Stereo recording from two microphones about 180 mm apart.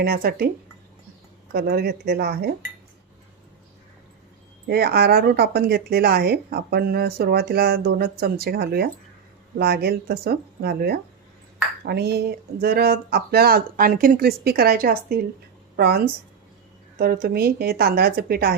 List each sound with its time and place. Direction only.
0.0 s speech: 60° right (ahead or behind)
1.5 s speech: 60° right (ahead or behind)
4.7 s a woman's voice: 60° right (ahead or behind)